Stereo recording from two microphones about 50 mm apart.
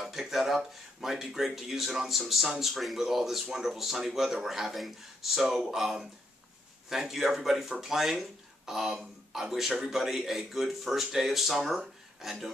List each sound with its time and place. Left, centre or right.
0.0 s speech: centre